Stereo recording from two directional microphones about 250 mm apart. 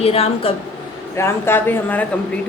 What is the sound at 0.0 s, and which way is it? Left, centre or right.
Speech, left.